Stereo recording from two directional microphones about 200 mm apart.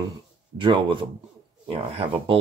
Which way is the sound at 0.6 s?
25° right (ahead or behind).